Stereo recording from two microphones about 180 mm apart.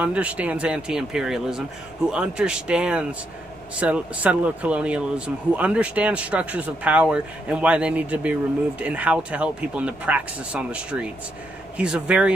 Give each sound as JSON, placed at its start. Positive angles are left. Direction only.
{"t": 0.0, "sound": "speech", "side_deg": -5}